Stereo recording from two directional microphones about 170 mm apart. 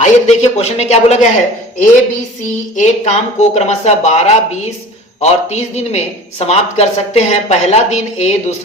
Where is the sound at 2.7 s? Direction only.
45° left (ahead or behind).